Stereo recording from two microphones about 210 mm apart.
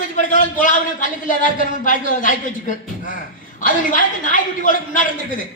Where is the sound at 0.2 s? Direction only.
35° left (ahead or behind).